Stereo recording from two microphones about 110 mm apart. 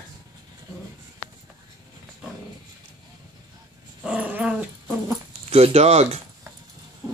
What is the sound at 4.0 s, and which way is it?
Dog, 10° right (ahead or behind).